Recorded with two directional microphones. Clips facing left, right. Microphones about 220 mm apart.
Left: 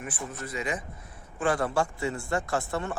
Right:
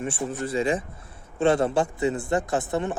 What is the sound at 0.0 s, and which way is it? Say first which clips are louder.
Speech: right 8 dB; 30° right (ahead or behind).